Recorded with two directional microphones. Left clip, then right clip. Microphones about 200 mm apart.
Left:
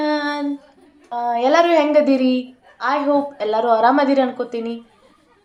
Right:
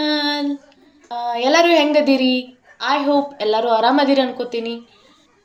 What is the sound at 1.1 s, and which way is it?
A woman's voice, 10° left (ahead or behind).